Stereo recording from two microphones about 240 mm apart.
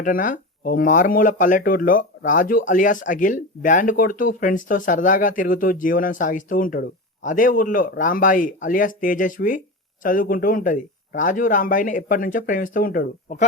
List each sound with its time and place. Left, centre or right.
0.0 s speech: left